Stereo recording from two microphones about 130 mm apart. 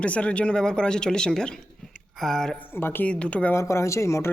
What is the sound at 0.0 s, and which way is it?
Speech, 10° left (ahead or behind).